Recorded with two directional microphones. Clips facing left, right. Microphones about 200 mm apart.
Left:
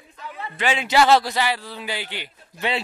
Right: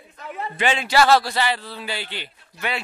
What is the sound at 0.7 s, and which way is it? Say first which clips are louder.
Speech: left 1 dB; 20° left (ahead or behind).